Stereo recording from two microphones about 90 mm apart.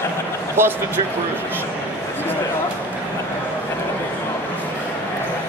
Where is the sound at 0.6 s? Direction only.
25° right (ahead or behind).